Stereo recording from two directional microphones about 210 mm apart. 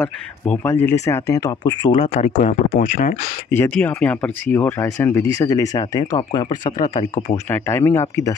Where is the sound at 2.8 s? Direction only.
40° left (ahead or behind).